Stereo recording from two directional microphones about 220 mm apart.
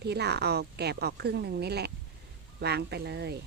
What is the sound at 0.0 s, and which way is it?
Speech, 50° right (ahead or behind).